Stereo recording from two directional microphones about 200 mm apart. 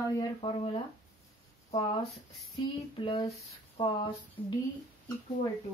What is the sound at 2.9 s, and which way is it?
Speech, 25° left (ahead or behind).